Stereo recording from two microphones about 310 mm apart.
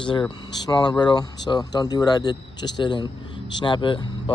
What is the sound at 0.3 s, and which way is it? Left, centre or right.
Speech, centre.